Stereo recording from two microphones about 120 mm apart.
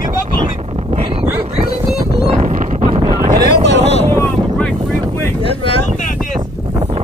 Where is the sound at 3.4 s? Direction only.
65° left (ahead or behind).